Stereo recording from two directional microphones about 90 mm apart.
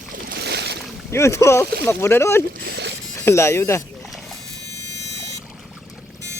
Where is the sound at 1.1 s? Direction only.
30° left (ahead or behind).